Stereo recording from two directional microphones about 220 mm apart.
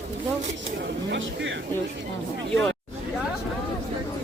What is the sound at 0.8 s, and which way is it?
Speech, 55° right (ahead or behind).